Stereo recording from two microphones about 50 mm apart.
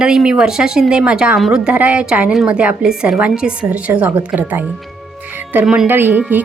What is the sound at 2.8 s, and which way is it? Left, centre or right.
Speech, centre.